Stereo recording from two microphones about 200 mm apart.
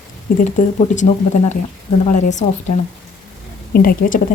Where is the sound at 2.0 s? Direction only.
40° left (ahead or behind).